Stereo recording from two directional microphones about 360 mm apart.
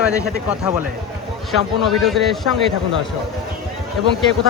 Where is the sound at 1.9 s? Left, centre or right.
Centre.